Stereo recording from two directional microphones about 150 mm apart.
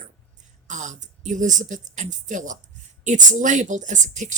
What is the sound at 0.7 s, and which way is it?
A woman's voice, 55° right (ahead or behind).